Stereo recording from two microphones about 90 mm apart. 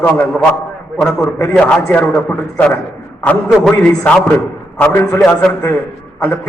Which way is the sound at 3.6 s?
10° left (ahead or behind).